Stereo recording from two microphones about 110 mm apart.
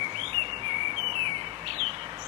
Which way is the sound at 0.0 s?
55° right (ahead or behind).